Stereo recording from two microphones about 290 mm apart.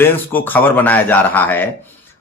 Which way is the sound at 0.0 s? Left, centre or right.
Centre.